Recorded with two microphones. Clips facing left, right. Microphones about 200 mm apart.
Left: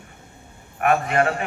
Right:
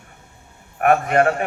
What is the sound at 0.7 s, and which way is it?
Speech, 50° right (ahead or behind).